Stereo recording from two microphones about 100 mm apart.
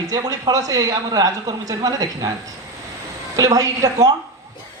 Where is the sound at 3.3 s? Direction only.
35° right (ahead or behind).